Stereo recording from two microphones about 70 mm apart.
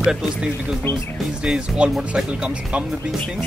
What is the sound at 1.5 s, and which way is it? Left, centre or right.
Speech, centre.